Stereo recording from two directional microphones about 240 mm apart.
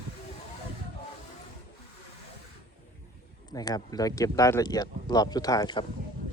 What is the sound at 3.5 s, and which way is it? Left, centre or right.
Speech, centre.